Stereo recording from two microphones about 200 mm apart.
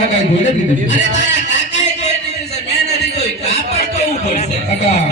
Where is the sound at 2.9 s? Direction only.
35° left (ahead or behind).